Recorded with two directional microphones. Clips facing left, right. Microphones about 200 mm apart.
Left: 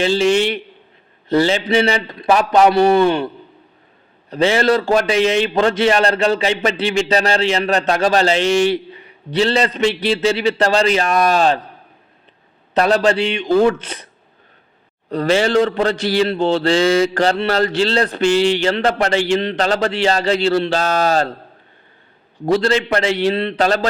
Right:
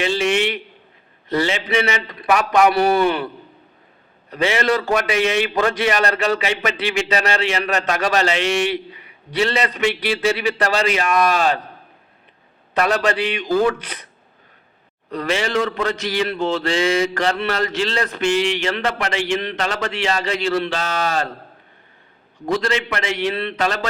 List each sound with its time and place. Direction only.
0.0 s a man's voice: 30° left (ahead or behind)
4.3 s a man's voice: 30° left (ahead or behind)
12.7 s a man's voice: 30° left (ahead or behind)
15.1 s a man's voice: 30° left (ahead or behind)
22.4 s a man's voice: 35° left (ahead or behind)